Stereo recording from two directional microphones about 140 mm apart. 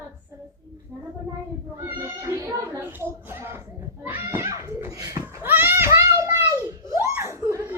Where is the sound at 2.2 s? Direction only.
20° right (ahead or behind).